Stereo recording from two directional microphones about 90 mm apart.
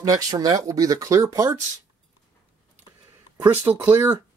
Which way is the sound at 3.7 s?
45° right (ahead or behind).